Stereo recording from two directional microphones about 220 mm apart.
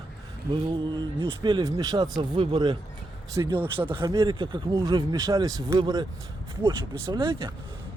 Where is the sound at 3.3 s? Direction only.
10° right (ahead or behind).